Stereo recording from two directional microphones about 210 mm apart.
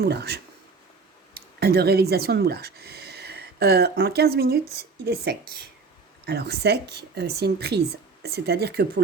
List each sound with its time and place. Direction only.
0.0 s a woman's voice: 50° right (ahead or behind)